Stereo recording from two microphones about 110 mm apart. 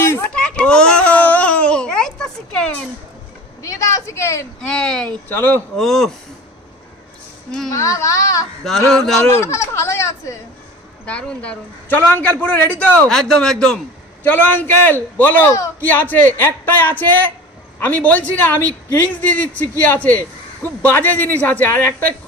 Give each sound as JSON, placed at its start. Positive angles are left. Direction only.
{"t": 0.0, "sound": "a sound", "side_deg": 20}
{"t": 0.3, "sound": "a sound", "side_deg": 10}
{"t": 3.6, "sound": "speech", "side_deg": 30}
{"t": 4.6, "sound": "a woman's voice", "side_deg": 5}
{"t": 5.3, "sound": "speech", "side_deg": 20}
{"t": 5.7, "sound": "a man's voice", "side_deg": 5}
{"t": 7.7, "sound": "speech", "side_deg": 30}
{"t": 8.9, "sound": "a man's voice", "side_deg": 5}
{"t": 9.3, "sound": "speech", "side_deg": 25}
{"t": 11.0, "sound": "a woman's voice", "side_deg": 10}
{"t": 13.1, "sound": "a man's voice", "side_deg": 5}
{"t": 14.3, "sound": "a woman's voice", "side_deg": 15}